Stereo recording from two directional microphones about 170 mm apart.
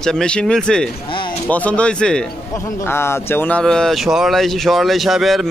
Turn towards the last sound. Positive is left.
turn(degrees=0)  # may be behind; listen again after turning